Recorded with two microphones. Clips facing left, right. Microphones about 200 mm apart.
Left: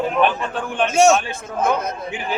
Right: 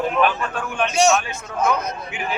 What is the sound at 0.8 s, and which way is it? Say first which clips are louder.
Speech: left 4 dB; 50° left (ahead or behind).